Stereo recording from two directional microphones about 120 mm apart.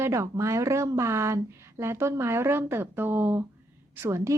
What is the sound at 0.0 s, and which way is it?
A woman's voice, 25° right (ahead or behind).